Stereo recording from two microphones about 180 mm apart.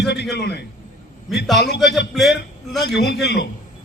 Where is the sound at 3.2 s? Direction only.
70° left (ahead or behind).